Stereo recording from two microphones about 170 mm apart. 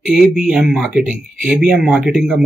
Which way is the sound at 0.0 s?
Centre (ahead or behind).